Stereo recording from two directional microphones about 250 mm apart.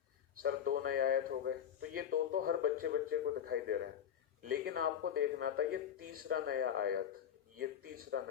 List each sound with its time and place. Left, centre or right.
0.4 s a man's voice: right